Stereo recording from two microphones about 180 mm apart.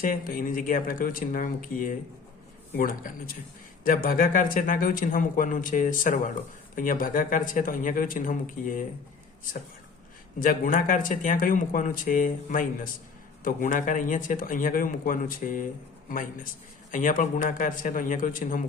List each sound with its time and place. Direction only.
0.0 s speech: 50° left (ahead or behind)
10.4 s speech: 50° left (ahead or behind)